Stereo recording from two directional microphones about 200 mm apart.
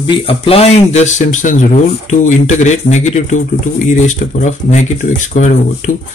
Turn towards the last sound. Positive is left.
turn(degrees=35)  # may be behind; listen again after turning